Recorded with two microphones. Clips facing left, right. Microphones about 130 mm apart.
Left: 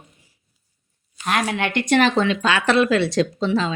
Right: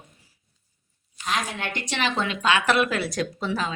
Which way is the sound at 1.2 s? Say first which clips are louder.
Left 6 dB; 65° left (ahead or behind).